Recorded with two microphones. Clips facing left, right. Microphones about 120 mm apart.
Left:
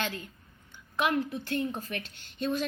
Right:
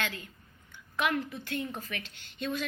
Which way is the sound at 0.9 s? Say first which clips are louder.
Left 2 dB; 20° left (ahead or behind).